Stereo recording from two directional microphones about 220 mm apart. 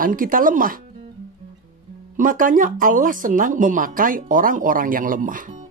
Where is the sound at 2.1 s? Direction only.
40° right (ahead or behind).